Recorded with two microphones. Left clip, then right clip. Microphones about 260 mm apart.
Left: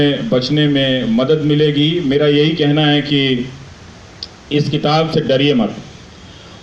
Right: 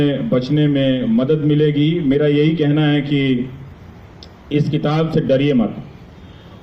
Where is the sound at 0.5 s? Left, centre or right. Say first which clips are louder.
Left 2 dB; left.